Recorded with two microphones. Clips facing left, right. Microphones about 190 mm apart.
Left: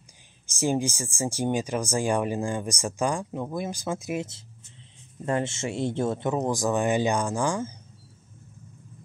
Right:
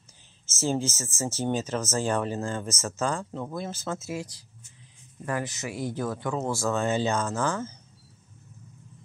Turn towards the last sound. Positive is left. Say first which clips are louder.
# left 2 dB
turn(degrees=15)  # may be behind; listen again after turning